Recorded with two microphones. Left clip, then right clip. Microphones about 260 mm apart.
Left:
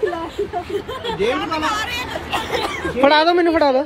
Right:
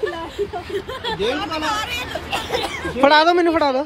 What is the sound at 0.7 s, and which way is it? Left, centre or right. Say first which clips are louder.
Speech: even; centre.